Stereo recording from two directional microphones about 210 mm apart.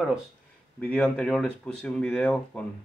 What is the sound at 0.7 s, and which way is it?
Speech, 5° left (ahead or behind).